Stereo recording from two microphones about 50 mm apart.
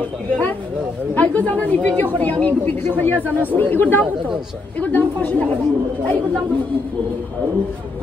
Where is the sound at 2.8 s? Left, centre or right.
Left.